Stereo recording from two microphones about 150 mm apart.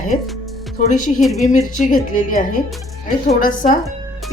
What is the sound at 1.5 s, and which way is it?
Speech, 65° left (ahead or behind).